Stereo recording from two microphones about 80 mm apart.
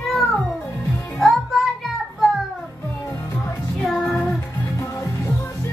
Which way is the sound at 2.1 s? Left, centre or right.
Centre.